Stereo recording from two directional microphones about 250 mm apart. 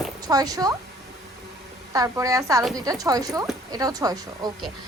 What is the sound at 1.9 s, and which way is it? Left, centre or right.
A woman's voice, centre.